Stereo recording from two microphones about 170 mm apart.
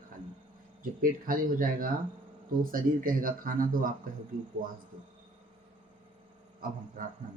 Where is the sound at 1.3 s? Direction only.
55° right (ahead or behind).